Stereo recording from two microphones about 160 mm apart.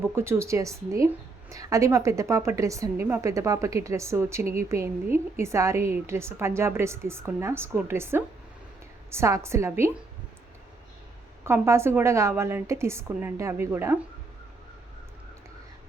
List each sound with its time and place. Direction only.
0.2 s a woman's voice: 15° right (ahead or behind)
11.4 s a woman's voice: 15° right (ahead or behind)